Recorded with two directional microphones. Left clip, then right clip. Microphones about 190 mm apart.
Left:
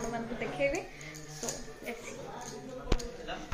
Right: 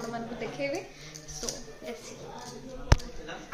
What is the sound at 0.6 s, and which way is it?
Speech, 5° right (ahead or behind).